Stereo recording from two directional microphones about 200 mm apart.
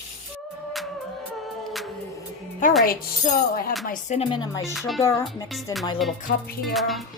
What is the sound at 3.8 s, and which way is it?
Speech, 40° left (ahead or behind).